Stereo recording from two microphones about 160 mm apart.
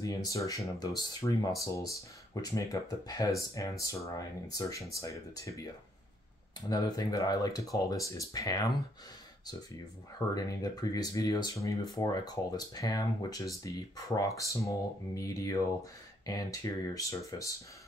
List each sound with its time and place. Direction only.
0.0 s speech: 20° left (ahead or behind)
6.7 s speech: 25° left (ahead or behind)
10.1 s speech: 25° left (ahead or behind)